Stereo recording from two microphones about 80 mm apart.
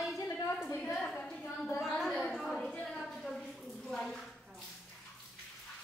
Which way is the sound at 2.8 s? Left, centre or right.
Centre.